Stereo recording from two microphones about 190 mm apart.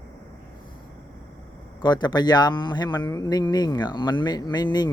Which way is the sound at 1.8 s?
25° left (ahead or behind).